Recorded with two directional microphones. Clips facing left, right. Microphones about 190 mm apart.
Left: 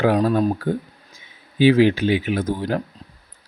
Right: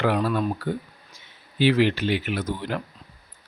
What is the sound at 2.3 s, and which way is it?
Speech, 50° left (ahead or behind).